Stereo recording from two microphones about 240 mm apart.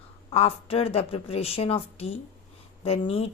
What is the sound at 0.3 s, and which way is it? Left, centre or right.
Speech, left.